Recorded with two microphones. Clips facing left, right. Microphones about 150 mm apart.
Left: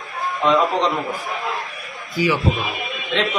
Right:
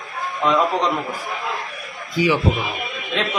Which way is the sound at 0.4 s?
5° right (ahead or behind).